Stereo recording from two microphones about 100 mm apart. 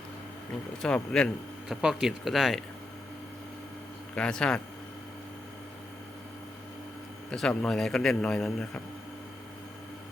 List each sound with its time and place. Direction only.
0.8 s a man's voice: 10° left (ahead or behind)
1.6 s speech: 5° right (ahead or behind)
4.1 s a man's voice: 10° left (ahead or behind)
7.3 s a man's voice: 10° left (ahead or behind)